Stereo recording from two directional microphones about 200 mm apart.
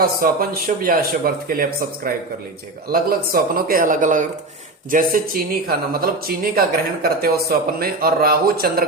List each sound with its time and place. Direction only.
0.0 s speech: 50° right (ahead or behind)
2.9 s speech: 45° right (ahead or behind)